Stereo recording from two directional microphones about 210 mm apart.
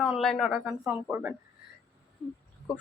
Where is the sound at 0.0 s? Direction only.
Centre (ahead or behind).